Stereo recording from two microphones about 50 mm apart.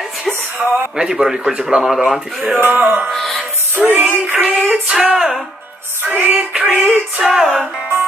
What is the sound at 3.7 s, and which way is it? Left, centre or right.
Music, right.